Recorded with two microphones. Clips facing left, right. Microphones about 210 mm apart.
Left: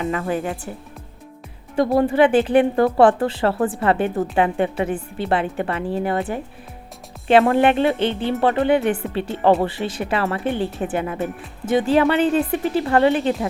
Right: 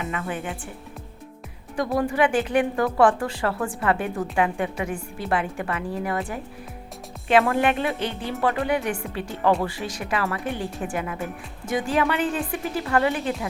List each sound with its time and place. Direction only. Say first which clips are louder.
0.0 s speech: left 7 dB; 35° left (ahead or behind)
1.7 s a woman's voice: left 6 dB; 30° left (ahead or behind)
7.3 s a woman's voice: left 5 dB; 30° left (ahead or behind)